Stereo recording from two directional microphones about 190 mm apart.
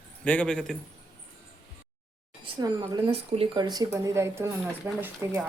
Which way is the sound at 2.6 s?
20° right (ahead or behind).